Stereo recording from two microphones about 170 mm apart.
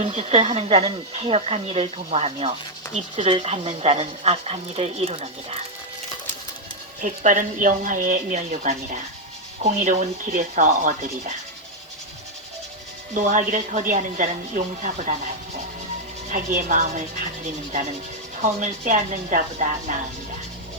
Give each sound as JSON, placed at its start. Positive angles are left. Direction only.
{"t": 0.0, "sound": "speech", "side_deg": -40}
{"t": 7.0, "sound": "speech", "side_deg": -50}
{"t": 13.1, "sound": "speech", "side_deg": -45}
{"t": 16.3, "sound": "speech", "side_deg": -50}